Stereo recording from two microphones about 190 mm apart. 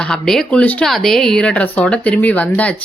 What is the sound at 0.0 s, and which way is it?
A woman's voice, 5° left (ahead or behind).